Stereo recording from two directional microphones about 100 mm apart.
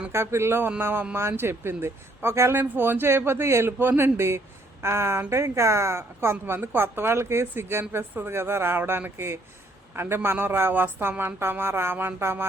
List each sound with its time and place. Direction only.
0.1 s a woman's voice: 25° right (ahead or behind)